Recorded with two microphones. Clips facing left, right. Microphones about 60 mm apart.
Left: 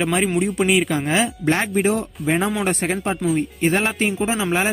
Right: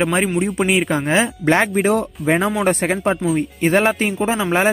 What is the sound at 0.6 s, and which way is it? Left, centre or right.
Speech, right.